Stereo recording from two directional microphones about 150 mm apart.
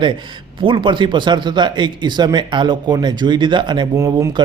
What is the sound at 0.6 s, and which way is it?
A man's voice, 35° right (ahead or behind).